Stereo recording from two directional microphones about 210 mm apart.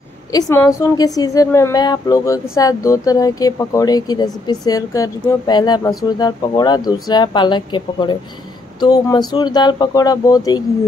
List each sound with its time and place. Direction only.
0.3 s speech: 15° left (ahead or behind)